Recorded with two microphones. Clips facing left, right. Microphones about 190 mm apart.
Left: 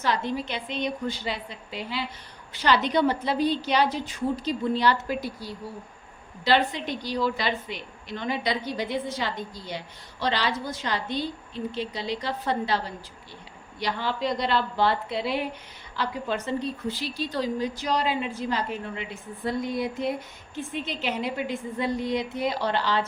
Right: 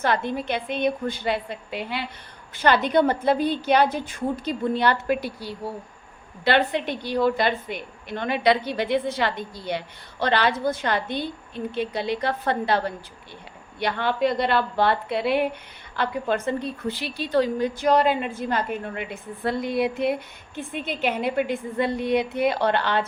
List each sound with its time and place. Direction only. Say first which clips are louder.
0.0 s a woman's voice: right 3 dB; 55° right (ahead or behind)
20.6 s a woman's voice: right 3 dB; 55° right (ahead or behind)